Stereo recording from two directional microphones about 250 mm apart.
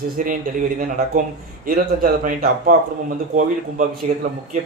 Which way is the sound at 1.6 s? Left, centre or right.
Right.